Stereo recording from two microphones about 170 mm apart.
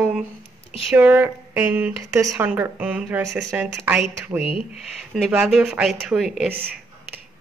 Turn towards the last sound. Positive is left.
turn(degrees=-10)  # may be behind; listen again after turning